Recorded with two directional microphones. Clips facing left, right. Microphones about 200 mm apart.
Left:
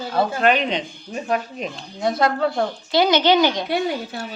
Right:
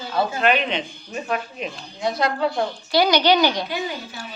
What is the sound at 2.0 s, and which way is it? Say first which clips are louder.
Speech: left 2 dB; 50° left (ahead or behind).